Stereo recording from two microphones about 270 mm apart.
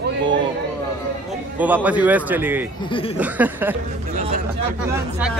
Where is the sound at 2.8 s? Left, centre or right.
Centre.